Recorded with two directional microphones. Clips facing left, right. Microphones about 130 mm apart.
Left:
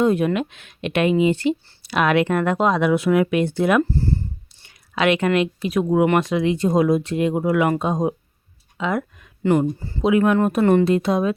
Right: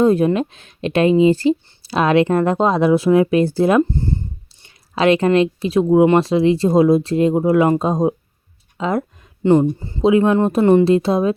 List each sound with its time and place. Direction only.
0.0 s speech: 35° right (ahead or behind)
3.8 s a sound: 20° right (ahead or behind)
4.9 s speech: 35° right (ahead or behind)
9.4 s speech: 25° right (ahead or behind)